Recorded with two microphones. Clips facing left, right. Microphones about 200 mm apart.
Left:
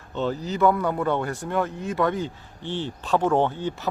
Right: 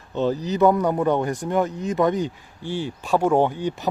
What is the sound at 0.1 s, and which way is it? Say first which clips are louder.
Speech: right 4 dB; 15° right (ahead or behind).